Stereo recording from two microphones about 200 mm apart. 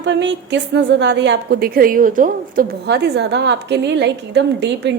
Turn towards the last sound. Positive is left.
turn(degrees=-60)  # may be behind; listen again after turning